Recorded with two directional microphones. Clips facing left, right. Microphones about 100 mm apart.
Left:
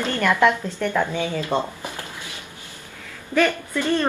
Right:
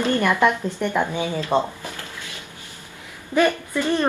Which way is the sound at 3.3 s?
15° right (ahead or behind).